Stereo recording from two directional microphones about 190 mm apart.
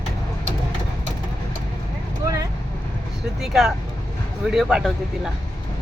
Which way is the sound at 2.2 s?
20° right (ahead or behind).